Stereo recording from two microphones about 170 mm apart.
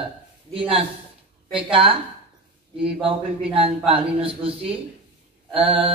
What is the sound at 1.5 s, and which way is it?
A man's voice, 30° right (ahead or behind).